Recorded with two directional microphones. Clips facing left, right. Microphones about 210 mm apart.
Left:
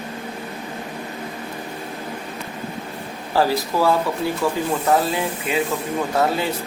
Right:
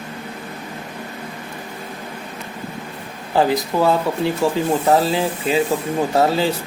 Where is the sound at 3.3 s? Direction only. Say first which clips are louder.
Right 2 dB; 20° right (ahead or behind).